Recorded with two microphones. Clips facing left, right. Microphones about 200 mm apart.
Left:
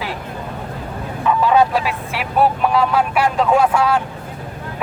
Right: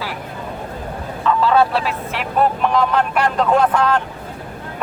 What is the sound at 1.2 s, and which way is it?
Speech, 15° left (ahead or behind).